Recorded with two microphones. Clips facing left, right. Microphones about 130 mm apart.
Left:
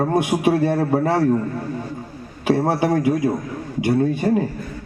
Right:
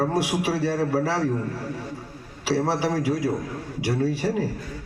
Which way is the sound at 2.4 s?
55° left (ahead or behind).